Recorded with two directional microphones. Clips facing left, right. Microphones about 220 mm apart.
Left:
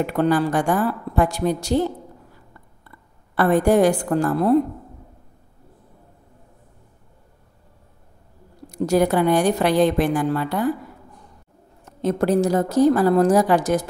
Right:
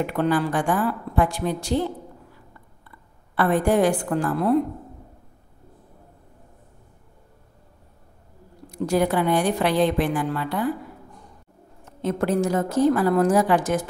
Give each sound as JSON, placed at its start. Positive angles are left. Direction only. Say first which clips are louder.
{"t": 0.0, "sound": "a woman's voice", "louder": "left 3 dB", "side_deg": 40}
{"t": 3.3, "sound": "a woman's voice", "louder": "left 3 dB", "side_deg": 40}
{"t": 8.6, "sound": "a woman's voice", "louder": "left 3 dB", "side_deg": 40}
{"t": 12.0, "sound": "a woman's voice", "louder": "left 3 dB", "side_deg": 40}